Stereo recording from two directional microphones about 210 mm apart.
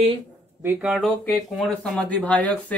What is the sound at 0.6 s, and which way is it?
Speech, 5° right (ahead or behind).